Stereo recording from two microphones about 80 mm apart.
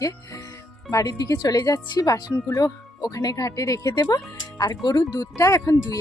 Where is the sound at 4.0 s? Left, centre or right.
Left.